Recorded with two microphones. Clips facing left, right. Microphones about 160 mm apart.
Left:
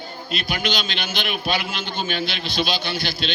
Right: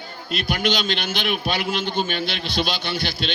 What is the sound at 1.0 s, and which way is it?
A man's voice, 60° right (ahead or behind).